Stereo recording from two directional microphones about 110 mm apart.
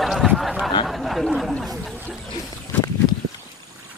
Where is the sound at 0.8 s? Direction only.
Centre (ahead or behind).